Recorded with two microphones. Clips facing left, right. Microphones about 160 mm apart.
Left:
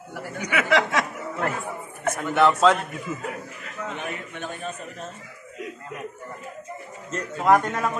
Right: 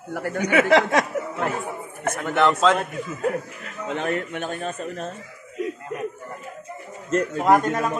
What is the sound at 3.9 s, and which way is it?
Speech, 75° right (ahead or behind).